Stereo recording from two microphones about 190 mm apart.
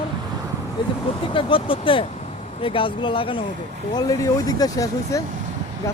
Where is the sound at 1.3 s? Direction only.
25° left (ahead or behind).